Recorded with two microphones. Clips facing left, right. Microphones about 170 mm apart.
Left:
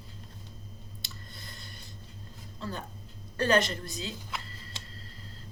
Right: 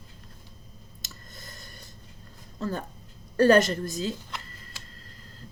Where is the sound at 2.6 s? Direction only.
45° right (ahead or behind).